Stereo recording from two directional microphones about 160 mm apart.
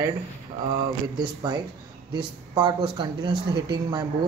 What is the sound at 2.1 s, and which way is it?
Speech, 30° right (ahead or behind).